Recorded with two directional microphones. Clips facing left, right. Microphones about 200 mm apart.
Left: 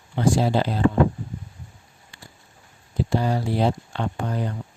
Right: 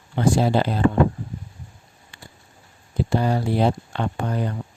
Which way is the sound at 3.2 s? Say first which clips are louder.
Right 2 dB; 55° right (ahead or behind).